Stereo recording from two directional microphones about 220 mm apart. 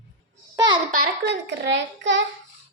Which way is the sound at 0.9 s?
50° right (ahead or behind).